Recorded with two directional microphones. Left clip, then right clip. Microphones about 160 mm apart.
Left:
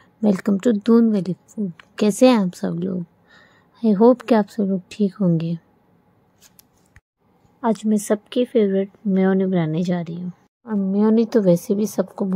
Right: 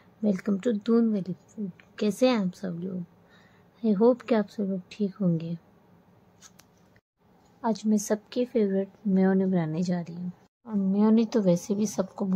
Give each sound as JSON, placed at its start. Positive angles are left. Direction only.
{"t": 0.2, "sound": "a woman's voice", "side_deg": 45}
{"t": 7.6, "sound": "a woman's voice", "side_deg": 30}